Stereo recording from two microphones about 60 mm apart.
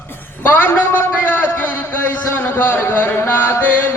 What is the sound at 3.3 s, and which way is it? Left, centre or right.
Music, left.